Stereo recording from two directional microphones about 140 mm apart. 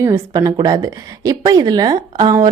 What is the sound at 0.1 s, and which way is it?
A woman's voice, 30° right (ahead or behind).